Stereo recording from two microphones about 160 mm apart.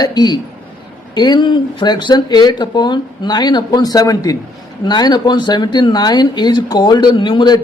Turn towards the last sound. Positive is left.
turn(degrees=30)  # may be behind; listen again after turning